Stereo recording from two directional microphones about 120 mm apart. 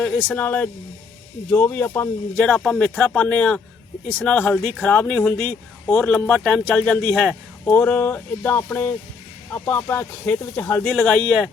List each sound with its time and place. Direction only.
0.3 s speech: 15° left (ahead or behind)
2.3 s speech: 10° left (ahead or behind)
10.9 s speech: 5° left (ahead or behind)